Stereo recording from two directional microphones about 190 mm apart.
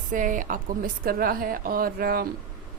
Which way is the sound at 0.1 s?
45° right (ahead or behind).